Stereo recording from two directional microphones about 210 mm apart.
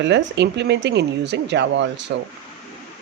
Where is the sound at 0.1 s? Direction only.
55° right (ahead or behind).